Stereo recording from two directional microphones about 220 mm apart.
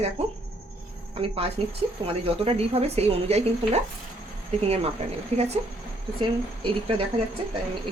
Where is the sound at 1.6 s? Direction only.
25° right (ahead or behind).